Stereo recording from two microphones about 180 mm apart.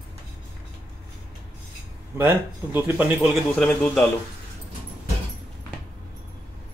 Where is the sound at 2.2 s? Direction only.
10° right (ahead or behind).